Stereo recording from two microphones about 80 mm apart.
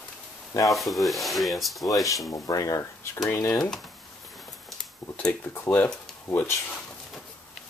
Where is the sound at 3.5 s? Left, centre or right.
Centre.